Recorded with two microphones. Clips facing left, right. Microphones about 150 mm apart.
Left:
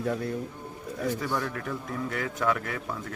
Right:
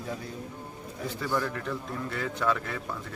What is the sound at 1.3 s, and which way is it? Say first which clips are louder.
A man's voice: right 1 dB; 10° left (ahead or behind).